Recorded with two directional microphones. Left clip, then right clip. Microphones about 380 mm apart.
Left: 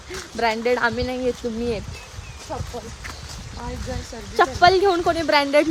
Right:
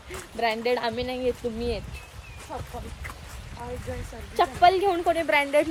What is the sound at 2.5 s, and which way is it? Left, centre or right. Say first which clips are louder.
Speech: left 5 dB; centre.